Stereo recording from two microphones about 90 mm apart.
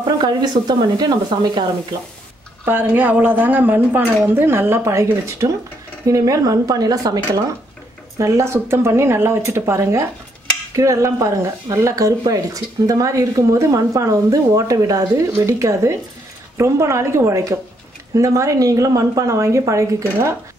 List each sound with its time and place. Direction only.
0.0 s speech: 50° right (ahead or behind)
2.6 s speech: 20° right (ahead or behind)